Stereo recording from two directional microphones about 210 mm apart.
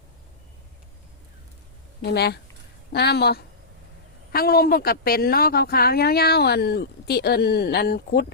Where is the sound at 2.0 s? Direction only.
50° left (ahead or behind).